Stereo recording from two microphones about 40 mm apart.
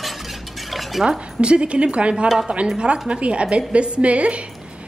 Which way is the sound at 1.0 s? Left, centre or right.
Centre.